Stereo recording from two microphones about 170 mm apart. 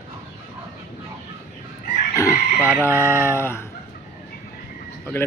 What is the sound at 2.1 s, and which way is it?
Chicken, 15° left (ahead or behind).